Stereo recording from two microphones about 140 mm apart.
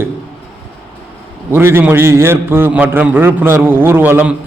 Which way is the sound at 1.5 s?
15° right (ahead or behind).